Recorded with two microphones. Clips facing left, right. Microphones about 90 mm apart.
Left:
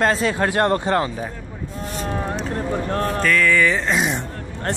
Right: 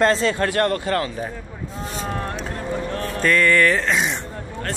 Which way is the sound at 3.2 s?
5° right (ahead or behind).